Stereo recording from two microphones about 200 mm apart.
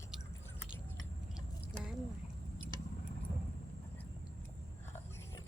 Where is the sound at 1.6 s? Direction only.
Centre (ahead or behind).